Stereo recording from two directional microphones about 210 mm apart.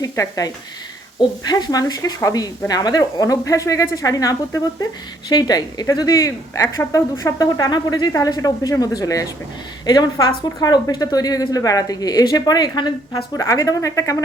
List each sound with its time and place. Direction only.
0.0 s speech: 15° left (ahead or behind)